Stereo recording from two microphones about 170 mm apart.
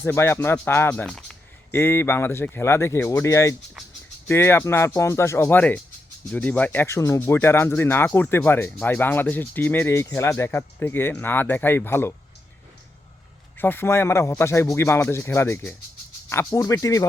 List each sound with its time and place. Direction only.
0.0 s speech: 15° left (ahead or behind)
13.6 s speech: 10° left (ahead or behind)